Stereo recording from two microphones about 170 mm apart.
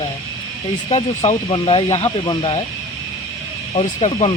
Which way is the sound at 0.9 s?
40° left (ahead or behind).